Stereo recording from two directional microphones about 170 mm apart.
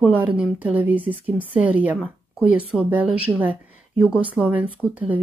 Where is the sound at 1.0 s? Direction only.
35° right (ahead or behind).